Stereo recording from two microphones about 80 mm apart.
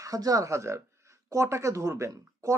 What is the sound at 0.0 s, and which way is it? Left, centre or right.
A man's voice, right.